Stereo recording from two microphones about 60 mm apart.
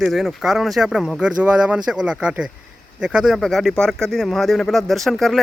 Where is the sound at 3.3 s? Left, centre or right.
Centre.